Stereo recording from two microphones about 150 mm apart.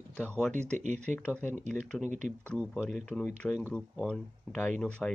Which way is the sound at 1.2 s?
10° left (ahead or behind).